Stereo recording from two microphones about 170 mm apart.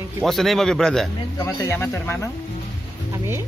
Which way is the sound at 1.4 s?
20° left (ahead or behind).